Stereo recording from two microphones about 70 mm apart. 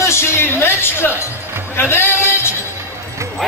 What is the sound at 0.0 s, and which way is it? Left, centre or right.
Music, left.